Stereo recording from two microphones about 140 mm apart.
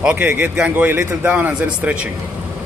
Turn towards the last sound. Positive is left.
turn(degrees=-10)  # may be behind; listen again after turning